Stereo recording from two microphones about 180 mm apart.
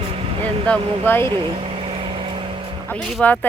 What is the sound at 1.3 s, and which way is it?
Vehicle, 25° right (ahead or behind).